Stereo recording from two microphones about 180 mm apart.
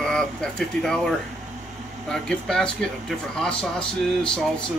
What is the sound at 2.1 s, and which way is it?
Speech, 5° left (ahead or behind).